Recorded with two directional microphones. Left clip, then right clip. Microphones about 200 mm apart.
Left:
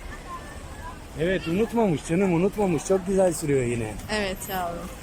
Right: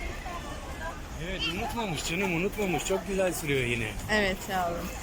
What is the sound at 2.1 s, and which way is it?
Speech, 15° left (ahead or behind).